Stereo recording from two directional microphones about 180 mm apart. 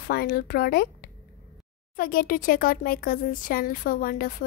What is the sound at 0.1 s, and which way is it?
A woman's voice, 60° left (ahead or behind).